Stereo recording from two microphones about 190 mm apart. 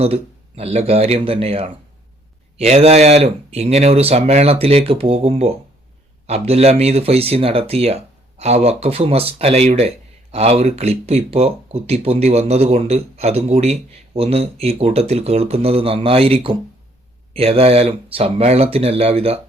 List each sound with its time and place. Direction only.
0.0 s speech: 30° right (ahead or behind)